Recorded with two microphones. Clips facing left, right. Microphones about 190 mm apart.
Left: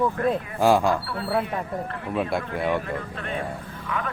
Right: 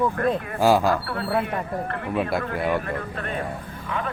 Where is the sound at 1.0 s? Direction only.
60° right (ahead or behind).